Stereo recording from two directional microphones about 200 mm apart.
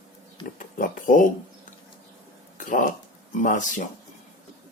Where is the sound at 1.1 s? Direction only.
45° left (ahead or behind).